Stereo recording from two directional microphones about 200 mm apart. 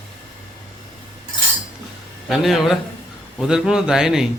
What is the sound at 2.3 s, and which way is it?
Speech, centre (ahead or behind).